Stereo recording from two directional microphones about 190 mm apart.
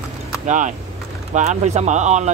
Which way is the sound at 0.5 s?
40° right (ahead or behind).